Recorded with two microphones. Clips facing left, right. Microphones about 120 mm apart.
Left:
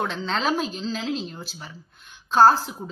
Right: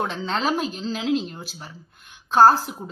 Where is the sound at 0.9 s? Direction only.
55° right (ahead or behind).